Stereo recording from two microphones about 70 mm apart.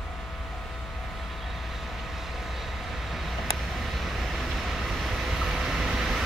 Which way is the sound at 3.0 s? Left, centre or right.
Centre.